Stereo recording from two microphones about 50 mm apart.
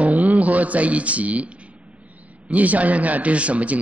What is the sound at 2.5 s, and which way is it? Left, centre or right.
Speech, right.